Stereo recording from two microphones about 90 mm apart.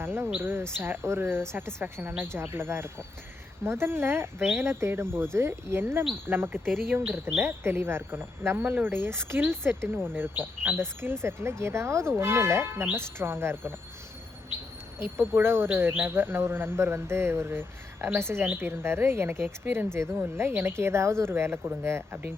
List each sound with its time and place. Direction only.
0.0 s speech: 25° right (ahead or behind)
15.3 s speech: 25° right (ahead or behind)